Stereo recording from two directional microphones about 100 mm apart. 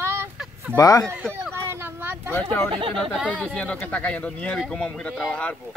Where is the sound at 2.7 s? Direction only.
65° right (ahead or behind).